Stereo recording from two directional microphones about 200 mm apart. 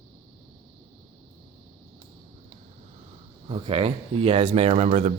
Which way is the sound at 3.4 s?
25° right (ahead or behind).